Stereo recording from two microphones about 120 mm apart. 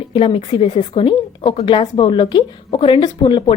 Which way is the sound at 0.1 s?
50° left (ahead or behind).